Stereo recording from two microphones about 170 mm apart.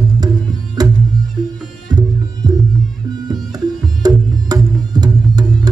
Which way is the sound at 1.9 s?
25° right (ahead or behind).